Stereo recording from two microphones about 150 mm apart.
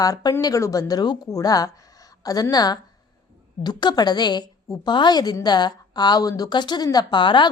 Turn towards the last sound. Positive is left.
turn(degrees=30)  # may be behind; listen again after turning